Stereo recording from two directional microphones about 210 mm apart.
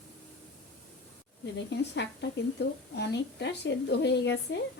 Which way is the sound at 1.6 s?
55° left (ahead or behind).